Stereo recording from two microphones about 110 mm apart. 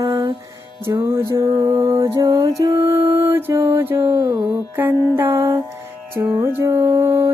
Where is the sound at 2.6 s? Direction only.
25° right (ahead or behind).